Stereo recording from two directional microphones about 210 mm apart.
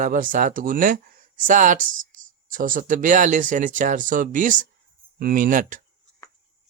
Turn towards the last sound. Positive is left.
turn(degrees=-40)  # may be behind; listen again after turning